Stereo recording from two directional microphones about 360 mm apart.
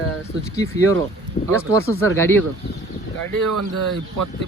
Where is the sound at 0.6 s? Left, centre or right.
Centre.